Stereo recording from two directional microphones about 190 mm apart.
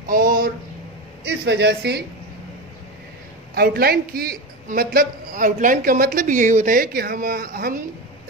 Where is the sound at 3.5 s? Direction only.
55° right (ahead or behind).